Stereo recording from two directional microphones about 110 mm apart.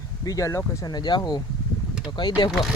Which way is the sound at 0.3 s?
30° left (ahead or behind).